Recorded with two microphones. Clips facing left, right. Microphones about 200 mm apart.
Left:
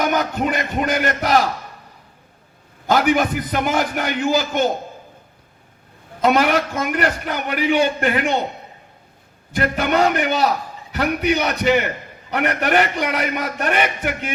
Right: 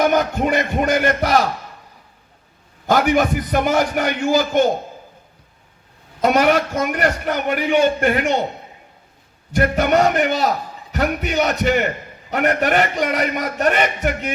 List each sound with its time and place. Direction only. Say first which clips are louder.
0.0 s a man's voice: right 3 dB; 50° right (ahead or behind)
2.9 s a man's voice: right 1 dB; 50° right (ahead or behind)
6.2 s a man's voice: right 1 dB; 45° right (ahead or behind)
9.5 s a man's voice: right 3 dB; 50° right (ahead or behind)